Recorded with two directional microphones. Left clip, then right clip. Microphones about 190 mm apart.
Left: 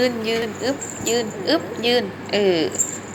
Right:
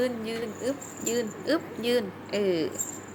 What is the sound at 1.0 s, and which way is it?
A woman's voice, 35° right (ahead or behind).